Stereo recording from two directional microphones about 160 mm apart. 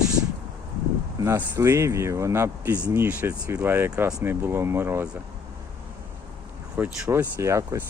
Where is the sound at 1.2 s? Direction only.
20° right (ahead or behind).